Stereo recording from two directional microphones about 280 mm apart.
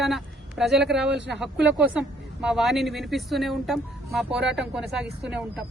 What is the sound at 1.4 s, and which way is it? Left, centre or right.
A woman's voice, centre.